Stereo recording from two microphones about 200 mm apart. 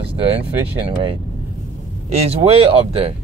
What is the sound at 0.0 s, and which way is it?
Speech, 30° right (ahead or behind).